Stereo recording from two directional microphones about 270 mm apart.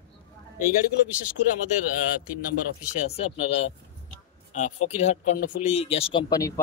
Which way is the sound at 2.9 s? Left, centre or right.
Left.